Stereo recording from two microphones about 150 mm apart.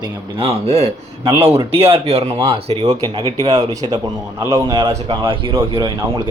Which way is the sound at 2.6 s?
45° right (ahead or behind).